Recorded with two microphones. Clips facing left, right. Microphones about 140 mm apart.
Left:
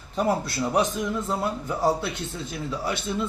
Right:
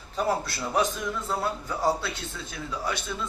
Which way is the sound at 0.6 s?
20° left (ahead or behind).